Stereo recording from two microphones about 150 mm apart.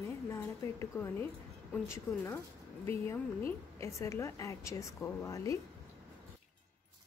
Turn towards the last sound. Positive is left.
turn(degrees=20)  # may be behind; listen again after turning